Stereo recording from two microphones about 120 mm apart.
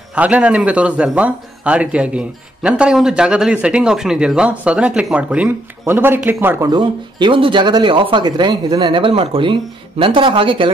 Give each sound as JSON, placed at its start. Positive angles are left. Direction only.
{"t": 0.1, "sound": "speech", "side_deg": -10}
{"t": 6.6, "sound": "speech", "side_deg": -40}